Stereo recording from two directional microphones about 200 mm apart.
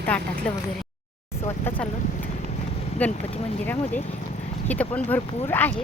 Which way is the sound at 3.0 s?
10° left (ahead or behind).